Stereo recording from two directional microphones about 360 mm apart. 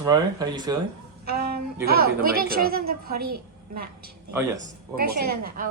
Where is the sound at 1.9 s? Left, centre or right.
Right.